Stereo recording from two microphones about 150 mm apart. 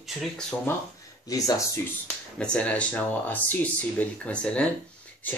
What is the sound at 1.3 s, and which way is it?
Speech, 20° left (ahead or behind).